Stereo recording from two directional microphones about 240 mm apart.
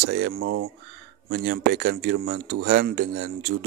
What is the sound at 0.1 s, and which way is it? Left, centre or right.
A man's voice, right.